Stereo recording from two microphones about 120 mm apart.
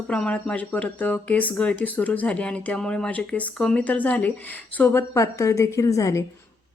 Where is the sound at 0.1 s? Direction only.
10° left (ahead or behind); by 6.2 s 25° left (ahead or behind).